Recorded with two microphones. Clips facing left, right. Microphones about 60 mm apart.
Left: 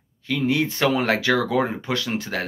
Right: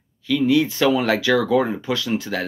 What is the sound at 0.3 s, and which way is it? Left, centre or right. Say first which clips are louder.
Speech: right 4 dB; left.